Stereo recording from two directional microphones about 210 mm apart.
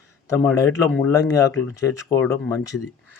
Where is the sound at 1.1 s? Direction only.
15° left (ahead or behind).